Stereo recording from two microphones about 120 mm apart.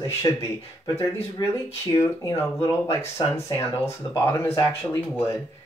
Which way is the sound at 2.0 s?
25° left (ahead or behind).